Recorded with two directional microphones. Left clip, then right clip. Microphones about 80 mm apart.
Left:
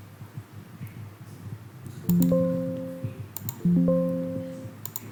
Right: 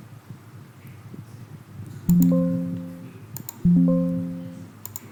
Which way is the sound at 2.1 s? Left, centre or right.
Right.